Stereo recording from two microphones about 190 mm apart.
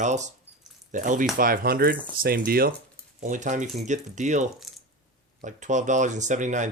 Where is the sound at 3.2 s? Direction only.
40° right (ahead or behind).